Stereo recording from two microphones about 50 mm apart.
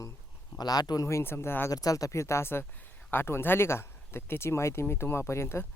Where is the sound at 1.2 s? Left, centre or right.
Left.